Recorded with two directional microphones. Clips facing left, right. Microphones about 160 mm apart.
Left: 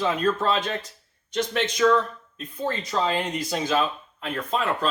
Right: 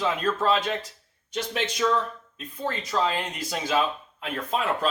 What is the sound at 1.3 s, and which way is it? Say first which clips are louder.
Speech: left 4 dB; 5° right (ahead or behind).